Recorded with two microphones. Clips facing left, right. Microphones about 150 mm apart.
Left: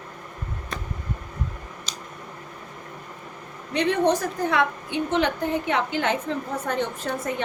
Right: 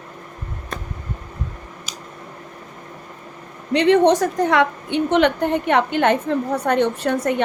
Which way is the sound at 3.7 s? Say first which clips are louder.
Right 7 dB; 90° right.